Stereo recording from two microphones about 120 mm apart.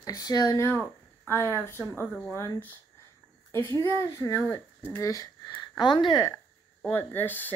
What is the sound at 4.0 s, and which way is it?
Speech, 25° left (ahead or behind).